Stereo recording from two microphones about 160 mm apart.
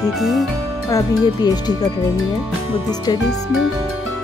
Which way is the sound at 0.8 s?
25° left (ahead or behind).